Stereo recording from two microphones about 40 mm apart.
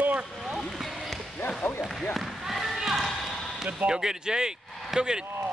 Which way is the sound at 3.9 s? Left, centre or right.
Centre.